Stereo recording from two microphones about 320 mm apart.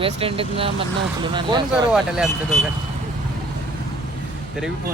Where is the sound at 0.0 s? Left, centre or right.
Centre.